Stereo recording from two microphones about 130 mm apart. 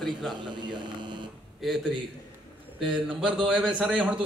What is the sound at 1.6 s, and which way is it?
A man's voice, centre (ahead or behind).